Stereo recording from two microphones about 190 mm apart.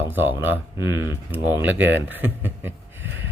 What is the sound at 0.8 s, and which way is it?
Speech, 20° left (ahead or behind).